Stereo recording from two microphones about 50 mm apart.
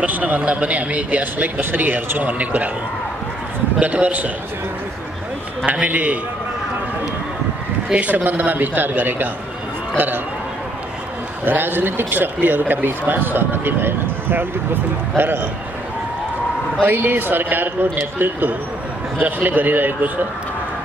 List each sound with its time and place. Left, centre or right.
0.0 s speech: right
3.8 s a man's voice: right
5.7 s speech: right
7.9 s speech: right
11.4 s speech: right
16.8 s speech: right